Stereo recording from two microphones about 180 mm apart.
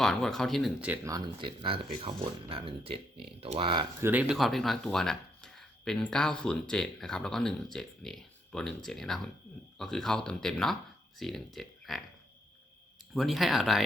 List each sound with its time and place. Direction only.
0.0 s speech: centre (ahead or behind)
1.0 s speech: 20° right (ahead or behind)
4.0 s speech: 10° right (ahead or behind)
13.1 s speech: centre (ahead or behind)